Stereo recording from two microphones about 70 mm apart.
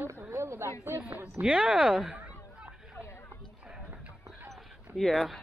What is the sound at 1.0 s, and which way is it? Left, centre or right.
Speech, right.